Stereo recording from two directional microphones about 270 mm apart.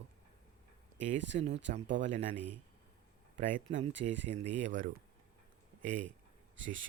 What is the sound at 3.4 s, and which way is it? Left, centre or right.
Speech, right.